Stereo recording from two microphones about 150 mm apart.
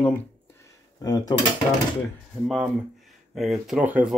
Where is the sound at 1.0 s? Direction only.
25° left (ahead or behind).